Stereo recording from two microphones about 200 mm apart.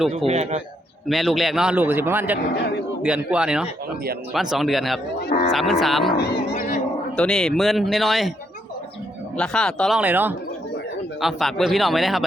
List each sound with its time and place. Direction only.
0.3 s a man's voice: 35° right (ahead or behind)
1.0 s a man's voice: centre (ahead or behind)
6.1 s speech: 55° left (ahead or behind)
6.6 s a sound: 40° left (ahead or behind)
7.2 s speech: 5° left (ahead or behind)
9.4 s speech: 5° left (ahead or behind)
10.0 s a man's voice: 10° right (ahead or behind)